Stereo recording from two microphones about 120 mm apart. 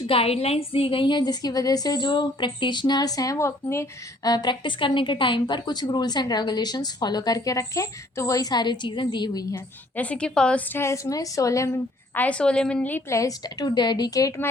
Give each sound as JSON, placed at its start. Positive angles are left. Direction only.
{"t": 0.1, "sound": "a woman's voice", "side_deg": 55}
{"t": 9.9, "sound": "a woman's voice", "side_deg": 10}
{"t": 13.1, "sound": "a woman's voice", "side_deg": 25}